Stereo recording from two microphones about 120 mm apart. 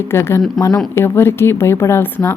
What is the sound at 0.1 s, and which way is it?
A woman's voice, 20° left (ahead or behind).